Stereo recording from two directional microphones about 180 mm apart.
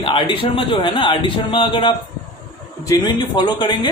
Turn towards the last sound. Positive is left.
turn(degrees=25)  # may be behind; listen again after turning